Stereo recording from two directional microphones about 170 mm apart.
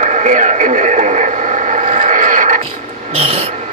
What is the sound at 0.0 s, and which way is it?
Radio, 45° right (ahead or behind).